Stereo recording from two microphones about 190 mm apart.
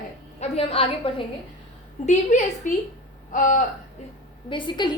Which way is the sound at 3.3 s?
45° left (ahead or behind).